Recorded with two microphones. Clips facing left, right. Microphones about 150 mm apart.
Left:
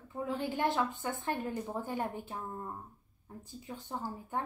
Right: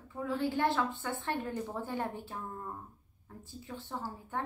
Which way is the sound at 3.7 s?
20° left (ahead or behind).